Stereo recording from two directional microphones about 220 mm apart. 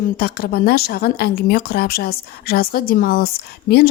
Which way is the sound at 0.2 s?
45° left (ahead or behind).